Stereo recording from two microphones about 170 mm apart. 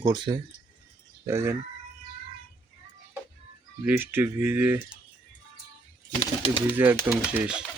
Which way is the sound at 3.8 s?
10° right (ahead or behind).